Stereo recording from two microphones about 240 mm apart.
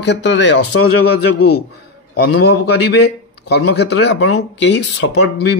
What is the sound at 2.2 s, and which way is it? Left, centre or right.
A man's voice, left.